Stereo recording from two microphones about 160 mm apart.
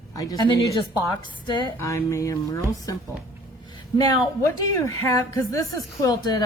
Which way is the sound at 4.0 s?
20° left (ahead or behind).